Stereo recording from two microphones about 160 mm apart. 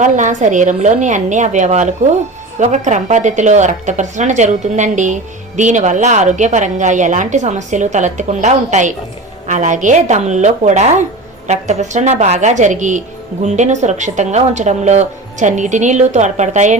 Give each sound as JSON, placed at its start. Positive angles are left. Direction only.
{"t": 0.0, "sound": "speech", "side_deg": -50}